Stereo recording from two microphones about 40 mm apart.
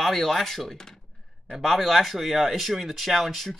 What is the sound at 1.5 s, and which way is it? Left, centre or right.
Speech, centre.